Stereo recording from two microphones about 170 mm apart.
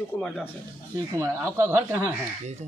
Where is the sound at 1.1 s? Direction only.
15° right (ahead or behind).